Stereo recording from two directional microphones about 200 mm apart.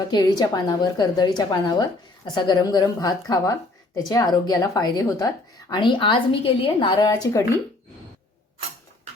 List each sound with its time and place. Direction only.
0.1 s a woman's voice: 20° left (ahead or behind)